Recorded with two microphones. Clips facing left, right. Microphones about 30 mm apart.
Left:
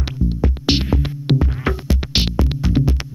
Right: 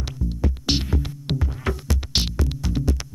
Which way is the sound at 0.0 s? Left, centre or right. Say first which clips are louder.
Left 6 dB; left.